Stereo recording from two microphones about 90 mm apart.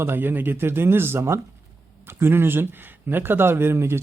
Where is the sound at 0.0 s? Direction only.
25° right (ahead or behind).